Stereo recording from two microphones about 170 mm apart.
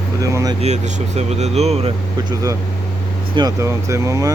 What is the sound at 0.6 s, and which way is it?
Speech, 40° right (ahead or behind).